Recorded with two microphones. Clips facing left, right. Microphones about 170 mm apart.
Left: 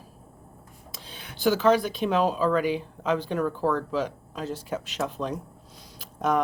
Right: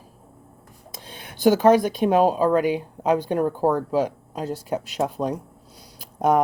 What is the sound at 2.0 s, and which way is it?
Speech, 50° right (ahead or behind).